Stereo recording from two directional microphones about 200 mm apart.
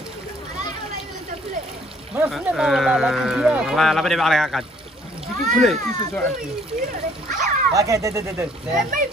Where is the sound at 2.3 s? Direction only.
5° right (ahead or behind).